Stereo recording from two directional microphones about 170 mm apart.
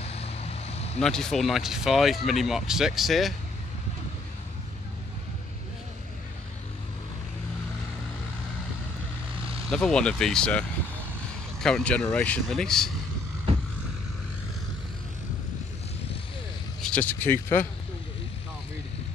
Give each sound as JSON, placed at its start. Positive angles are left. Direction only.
{"t": 0.0, "sound": "vehicle", "side_deg": 35}
{"t": 1.0, "sound": "speech", "side_deg": 5}
{"t": 9.7, "sound": "speech", "side_deg": 5}
{"t": 11.6, "sound": "speech", "side_deg": 5}
{"t": 16.8, "sound": "speech", "side_deg": 5}